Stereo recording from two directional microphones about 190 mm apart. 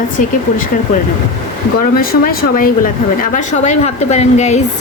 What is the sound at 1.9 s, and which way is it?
Speech, 50° left (ahead or behind).